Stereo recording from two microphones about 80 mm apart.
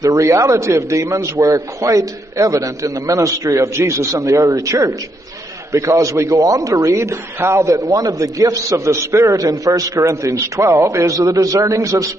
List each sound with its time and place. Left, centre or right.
0.0 s a man's voice: right
9.4 s a man's voice: right